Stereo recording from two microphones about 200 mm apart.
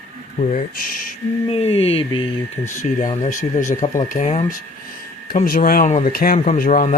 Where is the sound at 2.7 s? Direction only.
40° left (ahead or behind).